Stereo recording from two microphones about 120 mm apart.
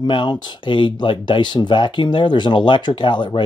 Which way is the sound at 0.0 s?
40° left (ahead or behind).